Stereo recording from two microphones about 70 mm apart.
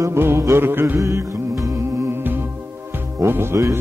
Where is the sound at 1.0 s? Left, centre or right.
Right.